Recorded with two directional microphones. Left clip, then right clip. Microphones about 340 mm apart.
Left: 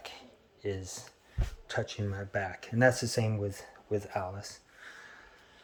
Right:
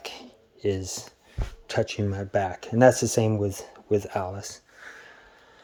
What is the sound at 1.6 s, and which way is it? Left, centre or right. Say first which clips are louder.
Speech: right 9 dB; right.